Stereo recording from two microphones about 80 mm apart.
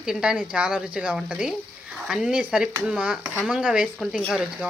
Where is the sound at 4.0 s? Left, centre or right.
Centre.